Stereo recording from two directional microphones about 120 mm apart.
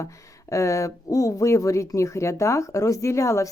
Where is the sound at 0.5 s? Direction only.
25° left (ahead or behind).